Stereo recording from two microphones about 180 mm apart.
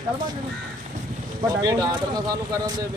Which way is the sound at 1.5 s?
20° right (ahead or behind).